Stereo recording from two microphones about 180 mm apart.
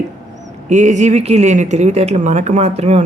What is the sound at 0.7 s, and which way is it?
Speech, 40° right (ahead or behind).